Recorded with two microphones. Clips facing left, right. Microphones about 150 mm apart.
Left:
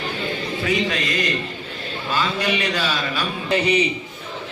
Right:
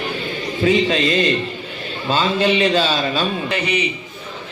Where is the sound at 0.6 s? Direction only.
25° right (ahead or behind).